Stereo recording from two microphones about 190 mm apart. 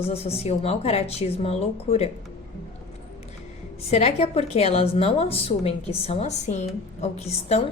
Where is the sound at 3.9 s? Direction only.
35° left (ahead or behind).